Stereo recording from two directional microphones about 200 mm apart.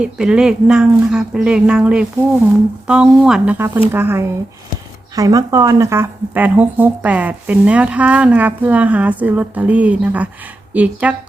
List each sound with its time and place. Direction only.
0.0 s speech: 5° right (ahead or behind)